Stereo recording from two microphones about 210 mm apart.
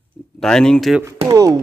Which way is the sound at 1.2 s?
20° right (ahead or behind).